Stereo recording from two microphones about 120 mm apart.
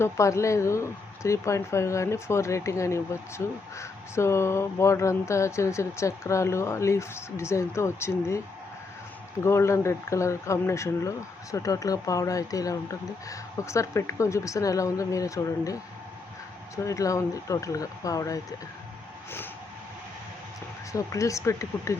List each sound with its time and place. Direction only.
0.0 s speech: 25° left (ahead or behind)
9.4 s speech: 25° left (ahead or behind)
20.9 s speech: 25° left (ahead or behind)